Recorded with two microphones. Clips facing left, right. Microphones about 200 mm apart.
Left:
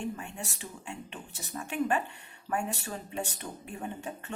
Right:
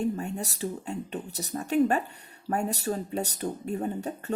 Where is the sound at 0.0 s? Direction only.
40° right (ahead or behind).